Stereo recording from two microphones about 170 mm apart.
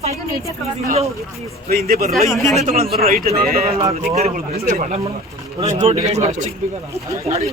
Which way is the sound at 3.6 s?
35° right (ahead or behind).